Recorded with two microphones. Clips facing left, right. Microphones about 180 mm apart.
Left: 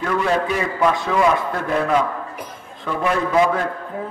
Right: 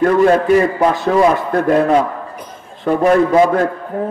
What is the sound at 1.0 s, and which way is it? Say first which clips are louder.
A man's voice: right 5 dB; 35° right (ahead or behind).